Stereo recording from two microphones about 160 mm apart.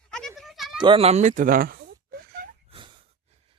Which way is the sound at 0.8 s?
35° right (ahead or behind).